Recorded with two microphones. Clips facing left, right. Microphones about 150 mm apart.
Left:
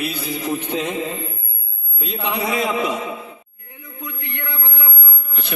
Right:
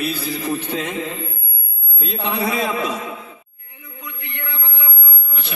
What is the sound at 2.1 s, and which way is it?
Speech, 30° right (ahead or behind).